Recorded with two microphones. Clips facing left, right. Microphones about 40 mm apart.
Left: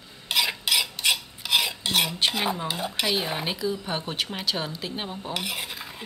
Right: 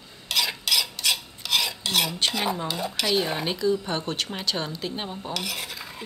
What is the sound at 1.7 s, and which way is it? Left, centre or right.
Cutlery, left.